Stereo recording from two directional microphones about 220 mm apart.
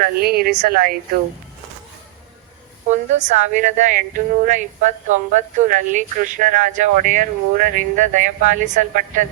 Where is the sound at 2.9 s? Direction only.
35° right (ahead or behind).